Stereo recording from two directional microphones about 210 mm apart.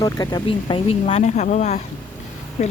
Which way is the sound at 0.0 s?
20° left (ahead or behind).